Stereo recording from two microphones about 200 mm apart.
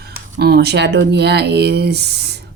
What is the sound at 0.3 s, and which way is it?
Speech, 55° right (ahead or behind).